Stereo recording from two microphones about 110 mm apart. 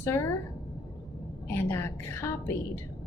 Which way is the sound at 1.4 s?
20° left (ahead or behind).